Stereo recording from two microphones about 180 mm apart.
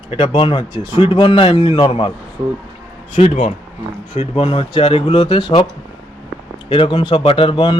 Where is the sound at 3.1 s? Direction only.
35° left (ahead or behind).